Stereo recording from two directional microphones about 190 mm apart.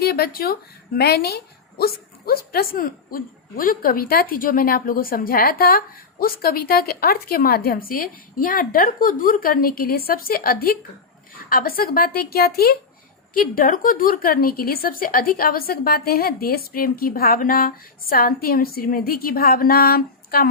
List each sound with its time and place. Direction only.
0.0 s a woman's voice: 55° left (ahead or behind)